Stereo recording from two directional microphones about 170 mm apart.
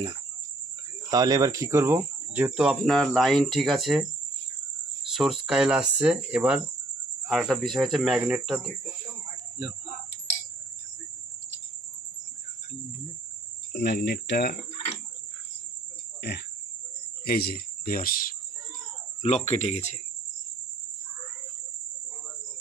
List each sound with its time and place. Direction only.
1.1 s speech: 20° right (ahead or behind); by 4.1 s centre (ahead or behind)
5.1 s speech: centre (ahead or behind)
13.7 s speech: 80° left
16.2 s speech: 80° left
17.2 s speech: 65° left (ahead or behind)
19.2 s speech: 40° left (ahead or behind)